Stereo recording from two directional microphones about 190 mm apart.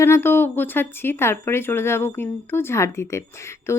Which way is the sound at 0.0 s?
10° left (ahead or behind).